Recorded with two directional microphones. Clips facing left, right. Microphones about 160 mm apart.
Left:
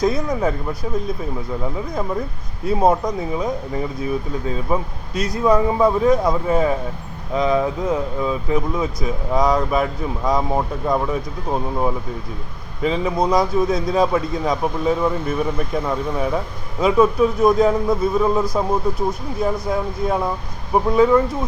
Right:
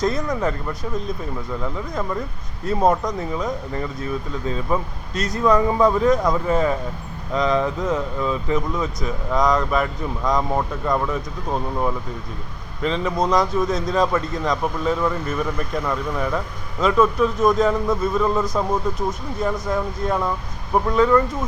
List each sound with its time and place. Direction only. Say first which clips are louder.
0.0 s speech: left 2 dB; 10° left (ahead or behind)